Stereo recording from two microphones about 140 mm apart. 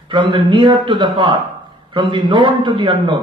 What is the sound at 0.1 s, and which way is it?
A man's voice, 35° right (ahead or behind).